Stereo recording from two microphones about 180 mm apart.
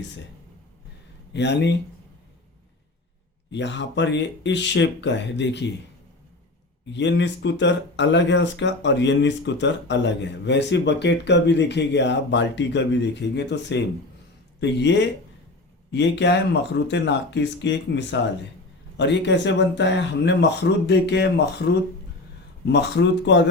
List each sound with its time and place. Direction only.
1.3 s speech: 75° left (ahead or behind)
3.5 s speech: 80° left
6.9 s speech: 80° left
22.6 s speech: 70° left (ahead or behind)